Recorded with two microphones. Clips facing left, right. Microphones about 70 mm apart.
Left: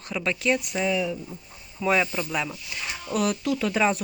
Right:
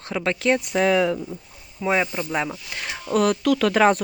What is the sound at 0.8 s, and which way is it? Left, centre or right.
Speech, right.